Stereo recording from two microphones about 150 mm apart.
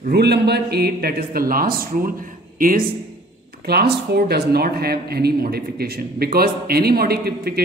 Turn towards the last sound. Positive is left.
turn(degrees=-90)